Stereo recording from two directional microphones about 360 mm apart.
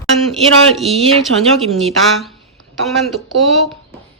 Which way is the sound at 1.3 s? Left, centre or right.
Right.